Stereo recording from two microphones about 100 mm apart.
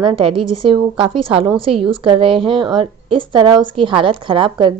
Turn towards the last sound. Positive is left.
turn(degrees=-55)  # may be behind; listen again after turning